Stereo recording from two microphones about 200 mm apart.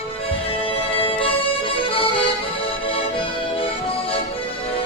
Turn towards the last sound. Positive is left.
turn(degrees=25)  # may be behind; listen again after turning